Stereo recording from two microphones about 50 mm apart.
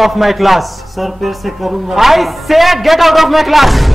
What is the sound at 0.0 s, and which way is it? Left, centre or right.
A man's voice, centre.